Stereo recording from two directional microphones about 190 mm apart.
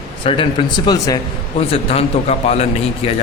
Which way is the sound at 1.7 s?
30° left (ahead or behind).